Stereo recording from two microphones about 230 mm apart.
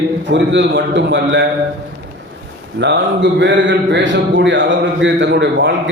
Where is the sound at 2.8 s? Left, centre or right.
Right.